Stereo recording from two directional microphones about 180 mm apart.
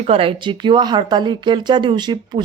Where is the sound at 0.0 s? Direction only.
30° right (ahead or behind).